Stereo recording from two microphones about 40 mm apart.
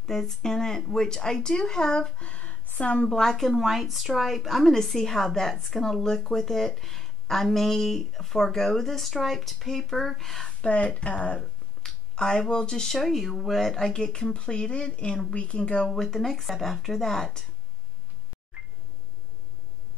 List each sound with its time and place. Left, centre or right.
0.0 s a woman's voice: centre
2.1 s speech: left
3.1 s a woman's voice: centre
10.6 s speech: left
11.3 s a sound: centre
12.9 s a woman's voice: centre
13.7 s speech: centre
15.9 s a woman's voice: centre